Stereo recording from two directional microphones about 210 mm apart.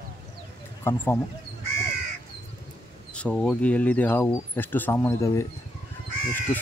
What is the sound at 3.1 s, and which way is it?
Speech, 5° left (ahead or behind).